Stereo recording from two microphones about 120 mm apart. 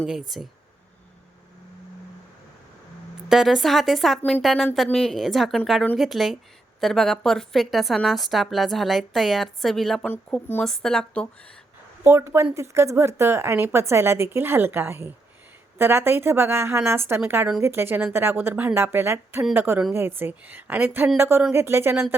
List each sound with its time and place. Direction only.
0.0 s a woman's voice: centre (ahead or behind)
3.2 s a woman's voice: centre (ahead or behind)
10.1 s speech: 15° left (ahead or behind)
10.6 s a woman's voice: 5° left (ahead or behind)
12.0 s a woman's voice: 20° right (ahead or behind)